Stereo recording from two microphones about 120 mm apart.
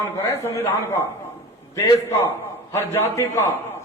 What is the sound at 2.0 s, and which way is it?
A man's voice, 20° left (ahead or behind).